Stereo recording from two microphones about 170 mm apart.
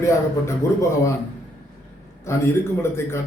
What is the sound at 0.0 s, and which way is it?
Speech, 15° left (ahead or behind).